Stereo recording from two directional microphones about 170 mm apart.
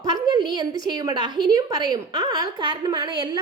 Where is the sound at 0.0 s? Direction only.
25° right (ahead or behind).